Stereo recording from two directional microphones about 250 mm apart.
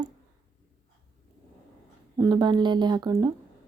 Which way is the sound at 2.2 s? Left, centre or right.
Centre.